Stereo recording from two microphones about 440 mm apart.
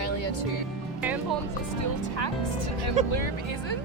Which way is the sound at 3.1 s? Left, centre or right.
Left.